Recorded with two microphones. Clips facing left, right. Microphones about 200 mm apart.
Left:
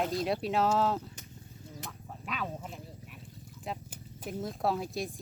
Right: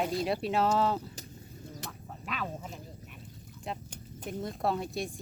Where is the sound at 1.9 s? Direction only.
Centre (ahead or behind).